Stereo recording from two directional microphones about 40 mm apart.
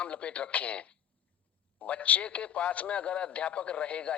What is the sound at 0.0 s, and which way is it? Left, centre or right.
Speech, left.